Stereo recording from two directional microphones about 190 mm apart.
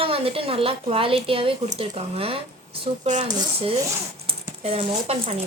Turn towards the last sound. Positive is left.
turn(degrees=-30)  # may be behind; listen again after turning